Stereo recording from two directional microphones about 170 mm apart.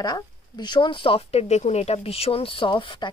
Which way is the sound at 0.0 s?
25° left (ahead or behind).